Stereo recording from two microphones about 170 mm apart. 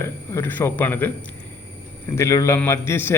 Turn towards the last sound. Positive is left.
turn(degrees=15)  # may be behind; listen again after turning